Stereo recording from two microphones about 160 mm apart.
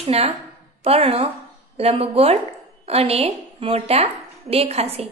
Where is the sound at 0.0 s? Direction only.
40° right (ahead or behind).